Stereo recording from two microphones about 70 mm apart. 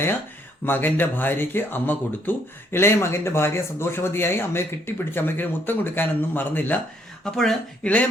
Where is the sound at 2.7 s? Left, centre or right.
Left.